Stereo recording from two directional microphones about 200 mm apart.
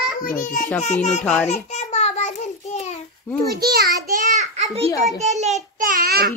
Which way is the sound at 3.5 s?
50° right (ahead or behind).